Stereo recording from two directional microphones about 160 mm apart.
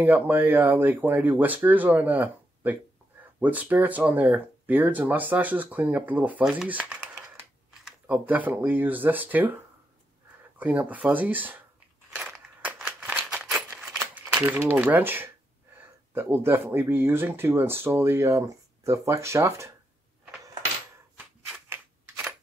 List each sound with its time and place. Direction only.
0.0 s speech: 10° right (ahead or behind)
10.6 s speech: 10° right (ahead or behind)
12.1 s scissors: 5° right (ahead or behind)
13.5 s crumpling: 5° right (ahead or behind)
14.7 s speech: 10° right (ahead or behind)
21.6 s scissors: 15° right (ahead or behind)